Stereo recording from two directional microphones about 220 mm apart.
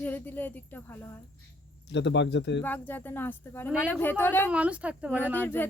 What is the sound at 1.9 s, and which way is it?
Speech, 55° left (ahead or behind).